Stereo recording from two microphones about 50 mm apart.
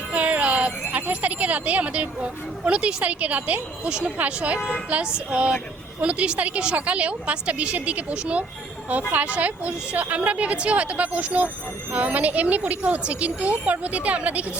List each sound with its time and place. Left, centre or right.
0.1 s a sound: right
2.6 s a woman's voice: right
3.8 s a woman's voice: centre